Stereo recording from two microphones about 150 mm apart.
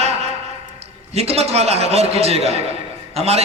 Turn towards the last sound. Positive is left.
turn(degrees=-45)  # may be behind; listen again after turning